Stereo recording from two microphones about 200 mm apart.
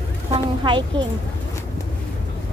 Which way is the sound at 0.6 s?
25° right (ahead or behind).